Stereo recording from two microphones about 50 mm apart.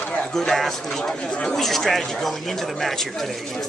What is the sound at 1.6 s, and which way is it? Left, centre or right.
Speech, centre.